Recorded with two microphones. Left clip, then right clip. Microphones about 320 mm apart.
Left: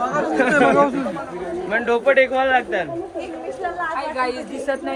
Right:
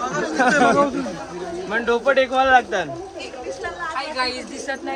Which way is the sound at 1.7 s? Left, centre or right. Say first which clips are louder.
Left 2 dB; centre.